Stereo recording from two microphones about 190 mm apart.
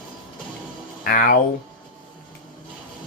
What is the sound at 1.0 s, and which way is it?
Speech, 45° left (ahead or behind).